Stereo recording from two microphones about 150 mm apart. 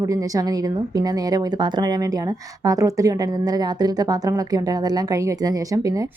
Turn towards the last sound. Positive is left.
turn(degrees=-25)  # may be behind; listen again after turning